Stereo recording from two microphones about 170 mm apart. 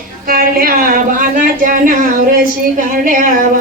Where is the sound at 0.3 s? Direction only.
60° right (ahead or behind).